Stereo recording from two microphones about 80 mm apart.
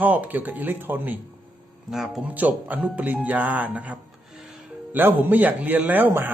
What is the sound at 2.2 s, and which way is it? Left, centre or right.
Speech, centre.